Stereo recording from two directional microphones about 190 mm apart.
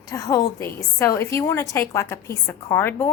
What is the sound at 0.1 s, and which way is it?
A woman's voice, 15° left (ahead or behind).